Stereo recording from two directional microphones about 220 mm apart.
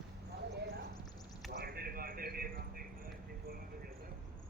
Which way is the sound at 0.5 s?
50° right (ahead or behind).